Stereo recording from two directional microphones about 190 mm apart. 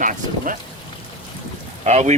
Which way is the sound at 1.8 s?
40° right (ahead or behind).